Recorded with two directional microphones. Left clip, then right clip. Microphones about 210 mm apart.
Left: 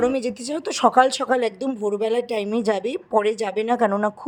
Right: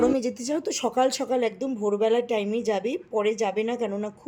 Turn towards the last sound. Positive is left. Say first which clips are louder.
# left 5 dB
turn(degrees=60)  # may be behind; listen again after turning